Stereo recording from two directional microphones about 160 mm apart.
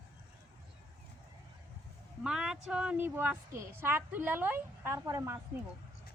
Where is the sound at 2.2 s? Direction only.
5° right (ahead or behind).